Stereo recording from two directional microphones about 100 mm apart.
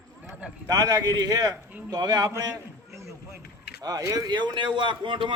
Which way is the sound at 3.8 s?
40° right (ahead or behind).